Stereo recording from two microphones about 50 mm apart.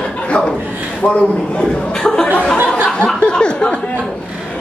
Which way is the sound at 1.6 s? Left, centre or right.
Centre.